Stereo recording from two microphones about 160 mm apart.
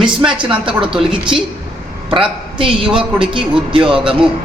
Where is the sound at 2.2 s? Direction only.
35° right (ahead or behind).